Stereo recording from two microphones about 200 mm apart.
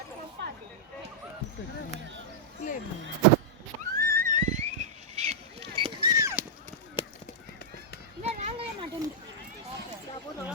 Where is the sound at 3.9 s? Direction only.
45° right (ahead or behind); by 6.4 s 15° right (ahead or behind).